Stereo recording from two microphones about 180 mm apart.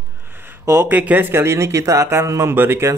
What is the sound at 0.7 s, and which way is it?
Speech, 15° right (ahead or behind).